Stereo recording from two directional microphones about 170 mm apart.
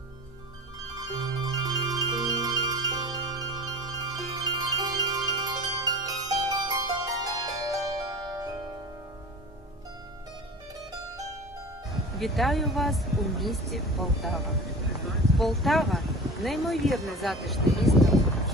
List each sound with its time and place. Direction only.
0.9 s music: 25° right (ahead or behind)
12.1 s speech: centre (ahead or behind)